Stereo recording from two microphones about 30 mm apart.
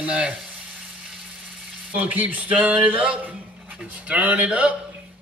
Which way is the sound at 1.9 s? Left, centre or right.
Right.